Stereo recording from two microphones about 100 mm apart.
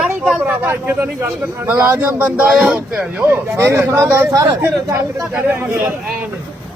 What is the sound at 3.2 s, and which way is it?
Speech, 25° right (ahead or behind).